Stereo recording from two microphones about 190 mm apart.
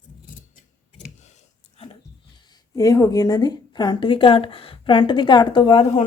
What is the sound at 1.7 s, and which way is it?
Speech, 30° left (ahead or behind).